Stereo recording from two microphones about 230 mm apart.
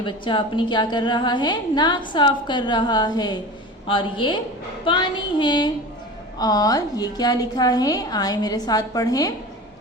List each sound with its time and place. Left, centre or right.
0.0 s a woman's voice: left